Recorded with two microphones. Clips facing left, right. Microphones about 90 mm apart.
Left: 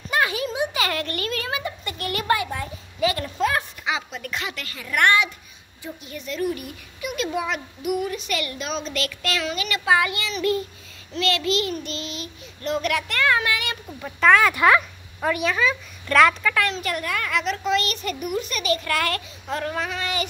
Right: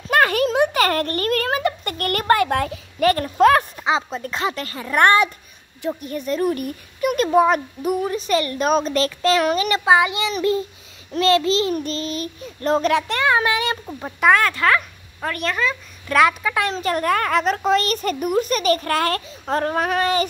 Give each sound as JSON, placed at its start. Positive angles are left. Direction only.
{"t": 0.1, "sound": "speech", "side_deg": -55}
{"t": 3.1, "sound": "speech", "side_deg": -50}
{"t": 3.8, "sound": "a child's voice", "side_deg": -35}
{"t": 9.0, "sound": "a child's voice", "side_deg": -30}
{"t": 11.1, "sound": "a child's voice", "side_deg": -35}
{"t": 14.5, "sound": "speech", "side_deg": 15}
{"t": 15.1, "sound": "a woman's voice", "side_deg": 5}
{"t": 16.4, "sound": "speech", "side_deg": -20}
{"t": 16.7, "sound": "a child's voice", "side_deg": -40}